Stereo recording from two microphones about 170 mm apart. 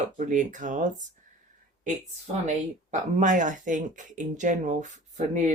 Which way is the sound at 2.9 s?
50° right (ahead or behind).